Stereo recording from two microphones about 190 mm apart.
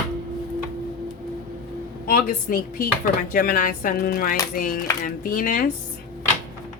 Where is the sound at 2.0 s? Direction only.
50° left (ahead or behind).